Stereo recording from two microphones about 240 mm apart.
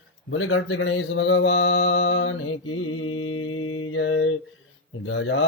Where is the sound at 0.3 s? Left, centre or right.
Left.